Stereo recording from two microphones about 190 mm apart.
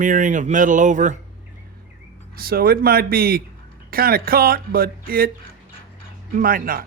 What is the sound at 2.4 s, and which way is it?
Speech, 50° right (ahead or behind).